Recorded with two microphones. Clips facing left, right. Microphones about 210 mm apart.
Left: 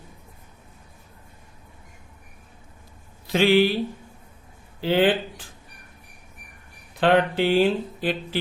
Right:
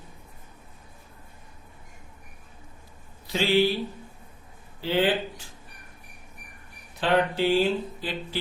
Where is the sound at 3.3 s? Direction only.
55° left (ahead or behind).